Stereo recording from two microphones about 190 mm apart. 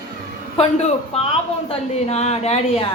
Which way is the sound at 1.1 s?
30° left (ahead or behind).